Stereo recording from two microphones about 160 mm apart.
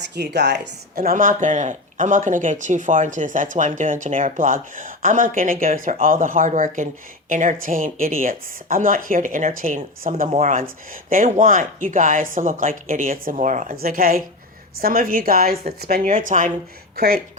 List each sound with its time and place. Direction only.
0.1 s speech: 90° right; by 16.5 s 55° right (ahead or behind)